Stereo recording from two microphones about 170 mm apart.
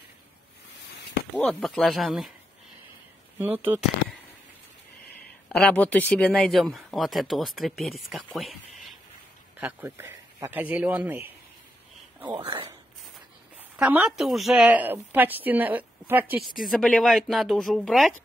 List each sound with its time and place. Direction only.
1.3 s speech: centre (ahead or behind)
3.3 s a woman's voice: 10° right (ahead or behind)
5.1 s a sound: 10° left (ahead or behind)
5.9 s speech: 10° left (ahead or behind)
9.6 s a woman's voice: 10° right (ahead or behind)
12.3 s speech: 30° right (ahead or behind)
13.7 s a woman's voice: 5° right (ahead or behind)
16.4 s speech: centre (ahead or behind)